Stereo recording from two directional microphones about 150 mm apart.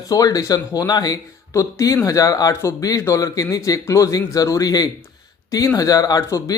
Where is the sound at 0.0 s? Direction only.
25° left (ahead or behind).